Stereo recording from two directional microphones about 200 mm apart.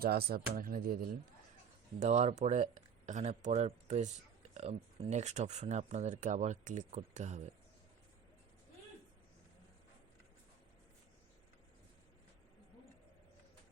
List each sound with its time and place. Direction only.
0.0 s speech: 50° right (ahead or behind)
2.0 s speech: 35° right (ahead or behind)